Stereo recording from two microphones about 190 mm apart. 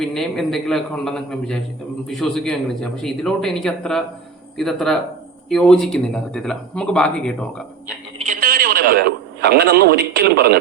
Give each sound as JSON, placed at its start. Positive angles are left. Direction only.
{"t": 0.0, "sound": "speech", "side_deg": 0}
{"t": 8.2, "sound": "radio", "side_deg": -45}